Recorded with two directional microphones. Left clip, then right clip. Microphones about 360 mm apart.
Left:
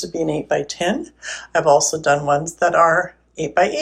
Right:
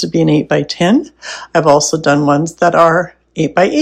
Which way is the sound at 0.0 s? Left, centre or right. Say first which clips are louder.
Right 9 dB; centre.